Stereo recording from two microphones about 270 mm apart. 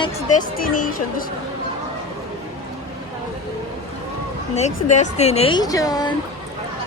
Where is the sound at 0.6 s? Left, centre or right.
Left.